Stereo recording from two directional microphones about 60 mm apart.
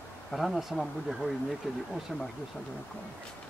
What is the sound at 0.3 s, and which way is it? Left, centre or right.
Speech, centre.